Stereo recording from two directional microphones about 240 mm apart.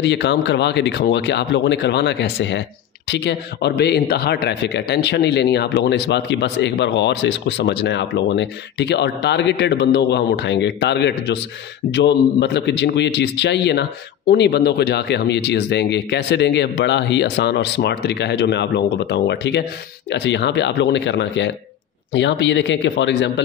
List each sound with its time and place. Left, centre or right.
0.0 s speech: left